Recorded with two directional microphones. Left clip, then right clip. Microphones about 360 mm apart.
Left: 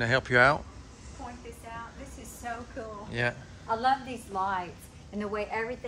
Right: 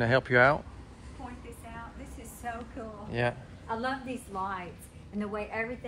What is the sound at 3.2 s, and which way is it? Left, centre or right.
Speech, centre.